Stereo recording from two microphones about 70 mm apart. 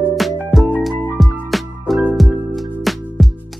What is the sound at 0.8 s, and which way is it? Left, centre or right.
Music, centre.